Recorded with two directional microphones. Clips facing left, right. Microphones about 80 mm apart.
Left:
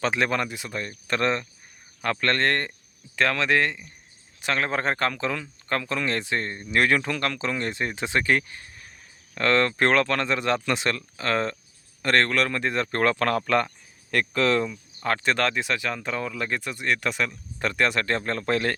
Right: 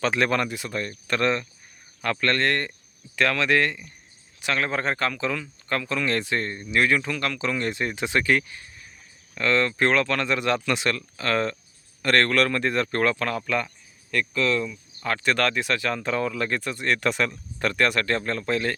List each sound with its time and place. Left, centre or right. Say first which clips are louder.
0.0 s speech: right 1 dB; centre
1.1 s speech: right 1 dB; left
4.4 s speech: even; left
6.1 s speech: right 1 dB; left
6.7 s speech: even; left
9.3 s speech: left 1 dB; left
14.7 s speech: left 2 dB; left; by 17.3 s centre
17.6 s speech: right 1 dB; centre; by 18.7 s left